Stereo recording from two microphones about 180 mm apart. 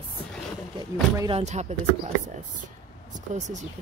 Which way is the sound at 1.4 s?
40° right (ahead or behind).